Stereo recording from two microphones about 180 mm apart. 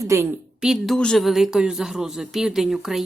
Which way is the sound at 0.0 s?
15° right (ahead or behind).